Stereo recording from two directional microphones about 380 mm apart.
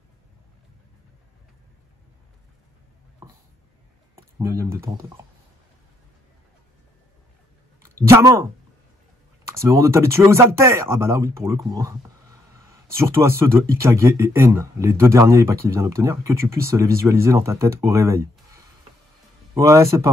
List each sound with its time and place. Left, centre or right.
3.2 s a sound: centre
4.1 s speech: centre
7.8 s speech: centre
9.5 s speech: centre